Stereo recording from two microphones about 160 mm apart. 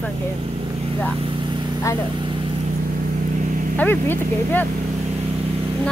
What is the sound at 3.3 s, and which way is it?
Vehicle, 50° right (ahead or behind).